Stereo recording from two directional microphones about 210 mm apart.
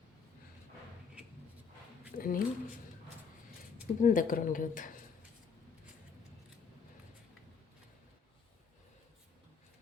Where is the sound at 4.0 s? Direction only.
40° left (ahead or behind).